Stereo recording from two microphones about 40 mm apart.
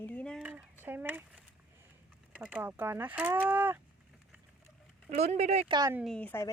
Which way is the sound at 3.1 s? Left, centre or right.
Right.